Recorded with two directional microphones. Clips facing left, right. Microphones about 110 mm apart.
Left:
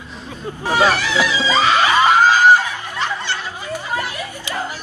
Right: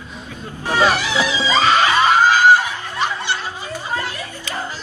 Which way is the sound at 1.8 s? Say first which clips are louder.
Left 1 dB; 15° left (ahead or behind).